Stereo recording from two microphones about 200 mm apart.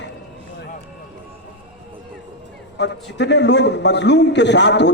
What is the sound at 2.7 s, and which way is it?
A man's voice, 60° left (ahead or behind).